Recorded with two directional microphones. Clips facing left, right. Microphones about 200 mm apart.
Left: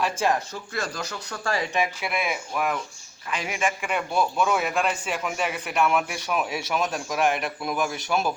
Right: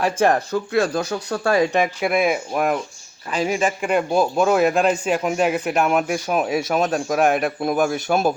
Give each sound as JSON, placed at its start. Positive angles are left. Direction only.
{"t": 0.0, "sound": "speech", "side_deg": -60}
{"t": 3.2, "sound": "a man's voice", "side_deg": -35}